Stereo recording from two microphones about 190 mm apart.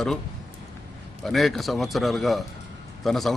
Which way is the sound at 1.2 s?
Centre (ahead or behind).